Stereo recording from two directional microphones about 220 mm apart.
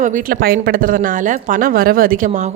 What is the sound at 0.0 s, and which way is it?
Speech, 40° right (ahead or behind).